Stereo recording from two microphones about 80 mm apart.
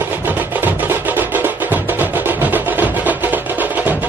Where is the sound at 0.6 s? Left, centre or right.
Right.